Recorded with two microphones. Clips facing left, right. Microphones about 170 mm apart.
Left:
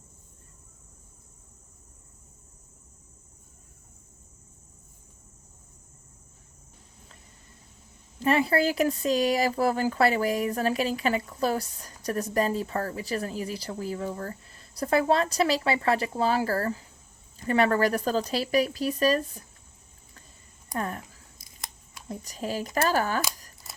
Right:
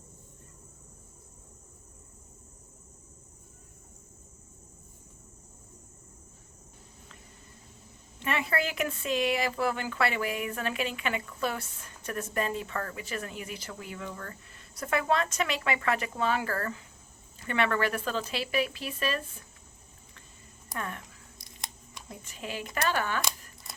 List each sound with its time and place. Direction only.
8.2 s speech: 35° left (ahead or behind)
20.7 s speech: 35° left (ahead or behind)
21.3 s scissors: 5° left (ahead or behind)
22.1 s speech: 40° left (ahead or behind)